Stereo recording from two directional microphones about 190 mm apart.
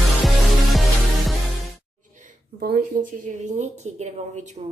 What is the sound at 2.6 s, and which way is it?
A woman's voice, 50° right (ahead or behind).